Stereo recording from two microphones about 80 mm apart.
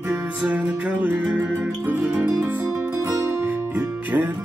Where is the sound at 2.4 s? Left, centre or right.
Right.